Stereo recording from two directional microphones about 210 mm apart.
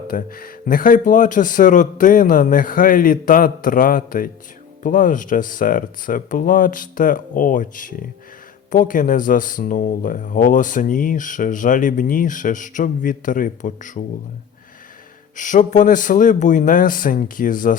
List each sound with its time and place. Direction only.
0.1 s speech: 40° left (ahead or behind)
15.4 s speech: 35° left (ahead or behind)